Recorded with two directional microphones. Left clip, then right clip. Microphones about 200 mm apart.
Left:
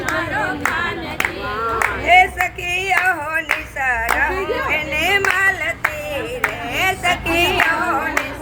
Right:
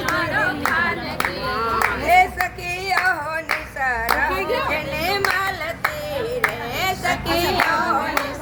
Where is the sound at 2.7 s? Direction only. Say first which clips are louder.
Left 3 dB; 10° left (ahead or behind).